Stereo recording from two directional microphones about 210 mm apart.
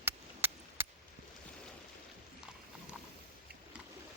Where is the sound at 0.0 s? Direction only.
10° right (ahead or behind).